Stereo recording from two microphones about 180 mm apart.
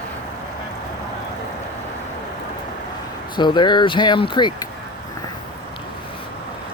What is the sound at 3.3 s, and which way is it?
Speech, 25° left (ahead or behind).